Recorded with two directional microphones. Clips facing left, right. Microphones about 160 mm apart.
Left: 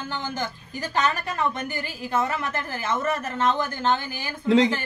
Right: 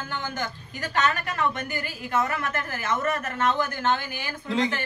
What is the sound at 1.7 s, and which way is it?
A woman's voice, 30° left (ahead or behind).